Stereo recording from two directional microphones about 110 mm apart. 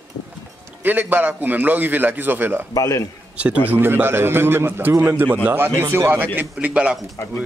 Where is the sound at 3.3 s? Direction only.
10° right (ahead or behind).